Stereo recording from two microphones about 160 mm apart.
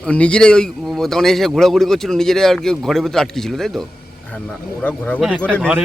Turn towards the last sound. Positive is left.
turn(degrees=-5)  # may be behind; listen again after turning